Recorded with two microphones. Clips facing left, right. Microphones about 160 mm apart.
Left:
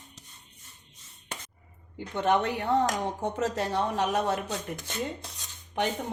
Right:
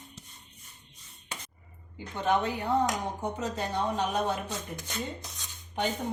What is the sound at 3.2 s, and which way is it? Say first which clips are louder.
Speech: left 4 dB; 85° left.